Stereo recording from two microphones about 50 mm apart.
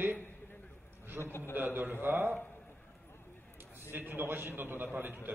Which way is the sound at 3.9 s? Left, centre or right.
Right.